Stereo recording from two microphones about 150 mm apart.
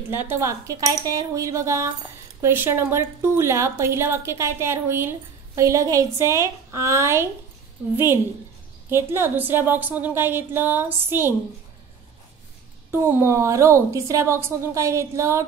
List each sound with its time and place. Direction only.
0.1 s a woman's voice: 15° right (ahead or behind)
12.9 s a woman's voice: 15° right (ahead or behind)